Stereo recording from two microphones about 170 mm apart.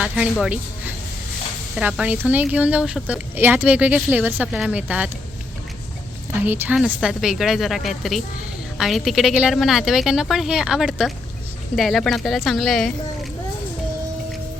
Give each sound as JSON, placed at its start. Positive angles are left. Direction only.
{"t": 0.0, "sound": "speech", "side_deg": -5}
{"t": 1.7, "sound": "speech", "side_deg": -5}
{"t": 6.4, "sound": "speech", "side_deg": -10}